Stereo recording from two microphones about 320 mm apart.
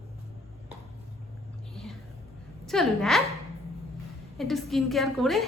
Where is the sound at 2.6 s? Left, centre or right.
Centre.